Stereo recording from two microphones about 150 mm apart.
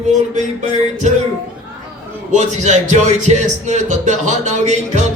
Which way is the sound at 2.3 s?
50° right (ahead or behind).